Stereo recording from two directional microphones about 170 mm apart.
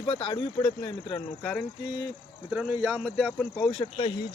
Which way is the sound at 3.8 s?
30° left (ahead or behind).